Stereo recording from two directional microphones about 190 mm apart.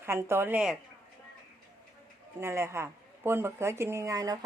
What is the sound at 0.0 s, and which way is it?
Speech, 10° right (ahead or behind).